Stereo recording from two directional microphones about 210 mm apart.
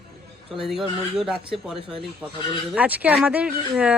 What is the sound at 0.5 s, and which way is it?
Speech, centre (ahead or behind).